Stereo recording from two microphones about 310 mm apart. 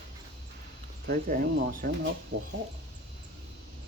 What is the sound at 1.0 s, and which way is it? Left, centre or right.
Speech, right.